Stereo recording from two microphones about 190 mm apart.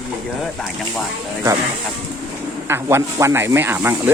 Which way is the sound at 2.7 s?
15° right (ahead or behind).